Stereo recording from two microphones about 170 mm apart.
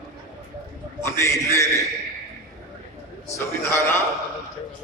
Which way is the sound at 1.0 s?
15° left (ahead or behind).